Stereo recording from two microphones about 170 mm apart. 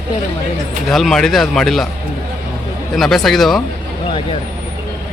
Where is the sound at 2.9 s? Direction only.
Centre (ahead or behind).